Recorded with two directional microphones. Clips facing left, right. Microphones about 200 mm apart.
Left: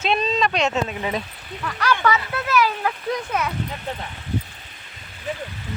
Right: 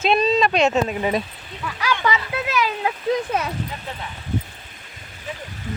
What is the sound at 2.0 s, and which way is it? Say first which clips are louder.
Speech: left 1 dB; 20° right (ahead or behind).